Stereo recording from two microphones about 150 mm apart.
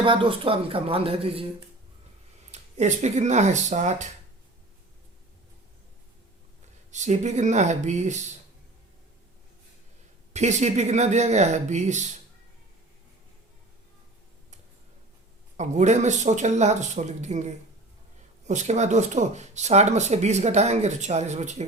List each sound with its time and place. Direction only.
0.0 s speech: 35° right (ahead or behind)
2.5 s speech: 50° right (ahead or behind)
6.9 s speech: 50° right (ahead or behind)
10.3 s speech: 50° right (ahead or behind)
15.5 s speech: 50° right (ahead or behind)